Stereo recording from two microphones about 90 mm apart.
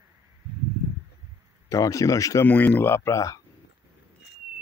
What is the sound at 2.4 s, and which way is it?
Speech, 15° left (ahead or behind).